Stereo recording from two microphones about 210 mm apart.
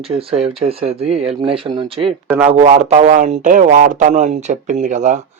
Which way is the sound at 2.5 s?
30° right (ahead or behind).